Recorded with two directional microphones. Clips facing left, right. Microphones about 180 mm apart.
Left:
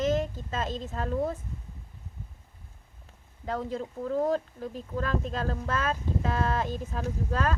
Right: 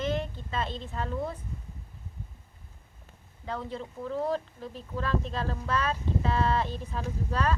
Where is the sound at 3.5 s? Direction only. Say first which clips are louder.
Left 4 dB; 45° left (ahead or behind).